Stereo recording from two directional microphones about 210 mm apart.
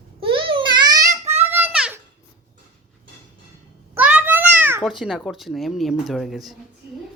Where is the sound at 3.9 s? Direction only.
5° right (ahead or behind).